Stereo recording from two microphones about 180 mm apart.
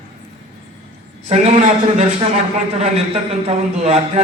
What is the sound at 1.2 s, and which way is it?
A man's voice, 40° right (ahead or behind).